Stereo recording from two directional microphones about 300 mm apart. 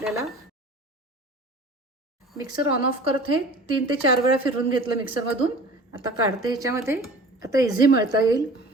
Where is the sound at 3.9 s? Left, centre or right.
Centre.